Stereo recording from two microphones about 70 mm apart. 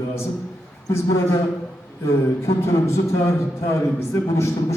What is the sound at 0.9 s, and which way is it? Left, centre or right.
A man's voice, left.